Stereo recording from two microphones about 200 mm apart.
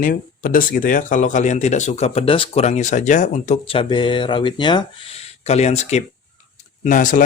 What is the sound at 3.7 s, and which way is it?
Speech, 25° left (ahead or behind).